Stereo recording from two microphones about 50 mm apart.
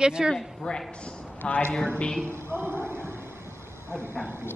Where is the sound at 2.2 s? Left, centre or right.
Right.